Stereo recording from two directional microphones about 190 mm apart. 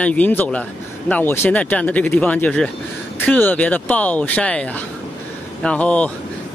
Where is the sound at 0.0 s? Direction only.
5° left (ahead or behind).